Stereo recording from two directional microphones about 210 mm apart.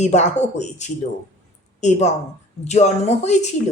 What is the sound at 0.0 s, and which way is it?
A woman's voice, 35° left (ahead or behind).